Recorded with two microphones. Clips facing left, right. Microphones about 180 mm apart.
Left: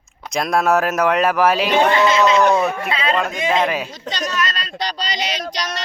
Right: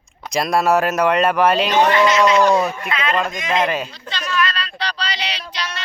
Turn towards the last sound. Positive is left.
turn(degrees=40)  # may be behind; listen again after turning